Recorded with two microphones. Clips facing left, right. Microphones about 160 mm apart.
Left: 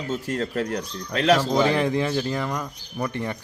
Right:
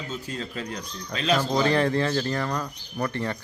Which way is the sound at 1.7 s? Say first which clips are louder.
Even; 15° left (ahead or behind).